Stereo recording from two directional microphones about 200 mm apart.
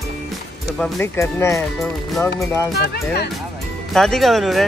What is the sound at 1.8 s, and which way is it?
Speech, 5° left (ahead or behind).